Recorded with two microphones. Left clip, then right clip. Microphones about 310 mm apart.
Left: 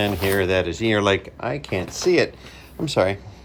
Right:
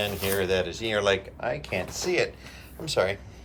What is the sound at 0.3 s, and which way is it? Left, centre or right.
Speech, left.